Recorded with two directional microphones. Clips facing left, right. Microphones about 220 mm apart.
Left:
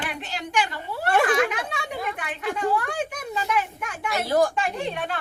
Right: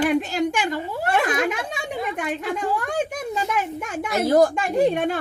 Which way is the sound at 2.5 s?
45° right (ahead or behind).